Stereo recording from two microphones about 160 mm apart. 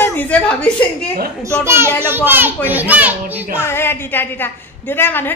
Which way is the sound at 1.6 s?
15° right (ahead or behind).